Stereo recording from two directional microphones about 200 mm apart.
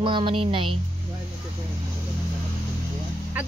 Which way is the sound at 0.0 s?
25° right (ahead or behind).